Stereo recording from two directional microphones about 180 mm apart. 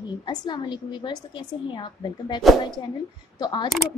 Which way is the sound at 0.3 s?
25° left (ahead or behind).